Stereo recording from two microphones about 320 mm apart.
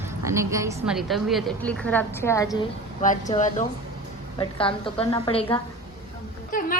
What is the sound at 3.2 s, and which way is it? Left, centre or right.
A woman's voice, left.